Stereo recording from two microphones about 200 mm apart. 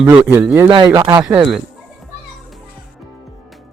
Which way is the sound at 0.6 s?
25° right (ahead or behind).